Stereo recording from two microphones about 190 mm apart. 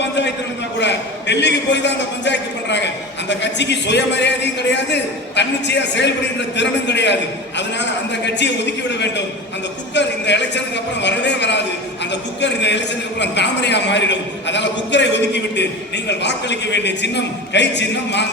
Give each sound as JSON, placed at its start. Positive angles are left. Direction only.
{"t": 0.0, "sound": "a sound", "side_deg": 65}
{"t": 0.8, "sound": "a man's voice", "side_deg": 65}
{"t": 9.9, "sound": "a man's voice", "side_deg": 65}